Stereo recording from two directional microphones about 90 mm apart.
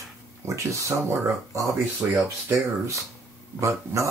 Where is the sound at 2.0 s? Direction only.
15° right (ahead or behind).